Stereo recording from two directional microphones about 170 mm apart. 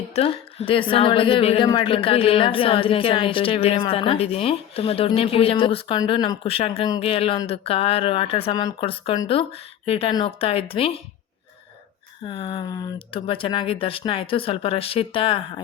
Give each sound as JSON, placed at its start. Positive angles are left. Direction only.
{"t": 0.1, "sound": "a woman's voice", "side_deg": 35}
{"t": 12.2, "sound": "a woman's voice", "side_deg": 30}